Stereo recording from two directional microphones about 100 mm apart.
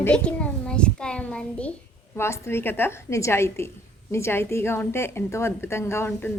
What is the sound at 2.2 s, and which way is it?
A woman's voice, 25° left (ahead or behind).